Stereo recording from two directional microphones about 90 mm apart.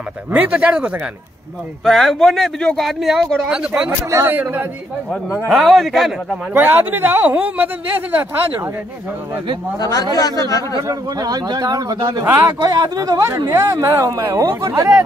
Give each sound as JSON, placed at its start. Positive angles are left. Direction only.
{"t": 0.3, "sound": "speech", "side_deg": -15}
{"t": 1.9, "sound": "speech", "side_deg": 0}
{"t": 4.1, "sound": "speech", "side_deg": -25}
{"t": 5.5, "sound": "speech", "side_deg": 0}
{"t": 6.5, "sound": "speech", "side_deg": -20}
{"t": 9.8, "sound": "speech", "side_deg": 45}
{"t": 10.8, "sound": "a man's voice", "side_deg": -45}
{"t": 12.3, "sound": "a man's voice", "side_deg": -35}